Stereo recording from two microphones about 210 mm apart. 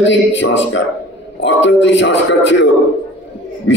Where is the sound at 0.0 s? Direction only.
60° left (ahead or behind).